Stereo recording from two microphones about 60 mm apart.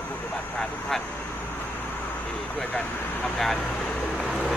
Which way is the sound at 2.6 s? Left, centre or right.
Left.